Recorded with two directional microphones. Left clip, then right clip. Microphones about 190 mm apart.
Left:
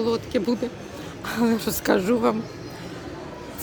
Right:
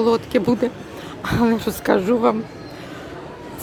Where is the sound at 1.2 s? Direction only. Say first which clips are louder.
Right 4 dB; 5° right (ahead or behind).